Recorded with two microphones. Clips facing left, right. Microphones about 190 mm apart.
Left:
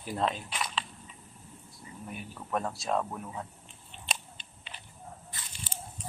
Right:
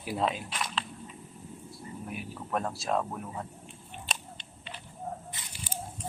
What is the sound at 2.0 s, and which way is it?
Speech, 5° right (ahead or behind).